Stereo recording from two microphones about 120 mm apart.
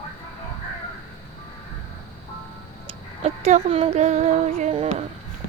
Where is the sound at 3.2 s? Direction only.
65° right (ahead or behind).